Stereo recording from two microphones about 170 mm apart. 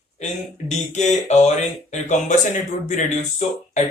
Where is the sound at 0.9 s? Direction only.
45° left (ahead or behind).